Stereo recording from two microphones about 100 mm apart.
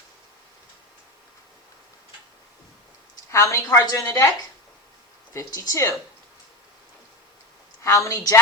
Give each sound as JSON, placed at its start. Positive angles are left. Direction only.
{"t": 3.3, "sound": "a woman's voice", "side_deg": 30}
{"t": 5.3, "sound": "a woman's voice", "side_deg": 35}
{"t": 7.9, "sound": "a woman's voice", "side_deg": 30}